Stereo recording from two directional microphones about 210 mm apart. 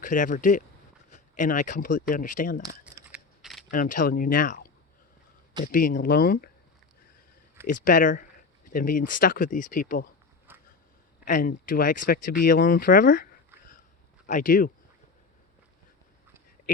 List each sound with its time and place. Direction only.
0.0 s speech: 40° left (ahead or behind)
2.8 s scissors: 5° right (ahead or behind)
3.7 s speech: 40° left (ahead or behind)
5.7 s speech: 40° left (ahead or behind)
7.9 s speech: 40° left (ahead or behind)
10.5 s a sound: 10° right (ahead or behind)
11.3 s speech: 40° left (ahead or behind)
14.3 s speech: 40° left (ahead or behind)